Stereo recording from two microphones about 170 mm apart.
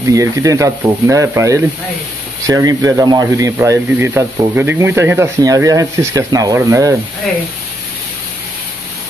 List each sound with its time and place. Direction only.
0.0 s speech: 20° right (ahead or behind)